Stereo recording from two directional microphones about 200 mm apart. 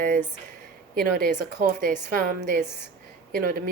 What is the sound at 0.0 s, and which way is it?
A woman's voice, 40° right (ahead or behind).